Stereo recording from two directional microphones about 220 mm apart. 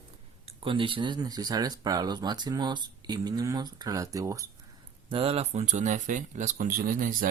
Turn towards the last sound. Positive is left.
turn(degrees=-40)  # may be behind; listen again after turning